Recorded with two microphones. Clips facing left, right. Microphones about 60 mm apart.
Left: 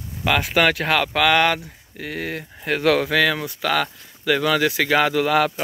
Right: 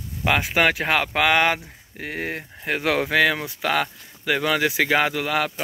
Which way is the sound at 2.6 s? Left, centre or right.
Centre.